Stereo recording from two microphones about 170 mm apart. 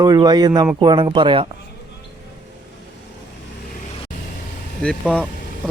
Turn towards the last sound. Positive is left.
turn(degrees=5)  # may be behind; listen again after turning